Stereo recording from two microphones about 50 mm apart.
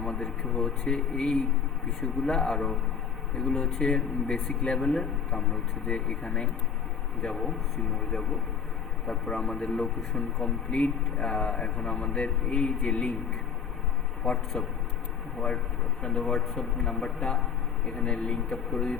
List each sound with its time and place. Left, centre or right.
0.6 s a man's voice: centre
7.2 s speech: centre
9.0 s a man's voice: centre
14.3 s a man's voice: centre
16.0 s a man's voice: centre
18.5 s speech: centre